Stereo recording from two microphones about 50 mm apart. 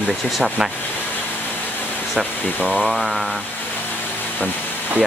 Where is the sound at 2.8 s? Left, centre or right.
Centre.